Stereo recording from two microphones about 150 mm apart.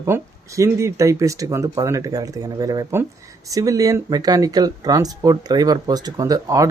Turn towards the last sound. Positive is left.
turn(degrees=-20)  # may be behind; listen again after turning